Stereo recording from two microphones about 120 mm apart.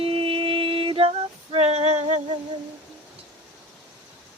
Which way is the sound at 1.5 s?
60° right (ahead or behind).